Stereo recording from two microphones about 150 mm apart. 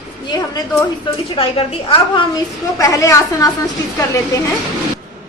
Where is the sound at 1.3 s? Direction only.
40° left (ahead or behind).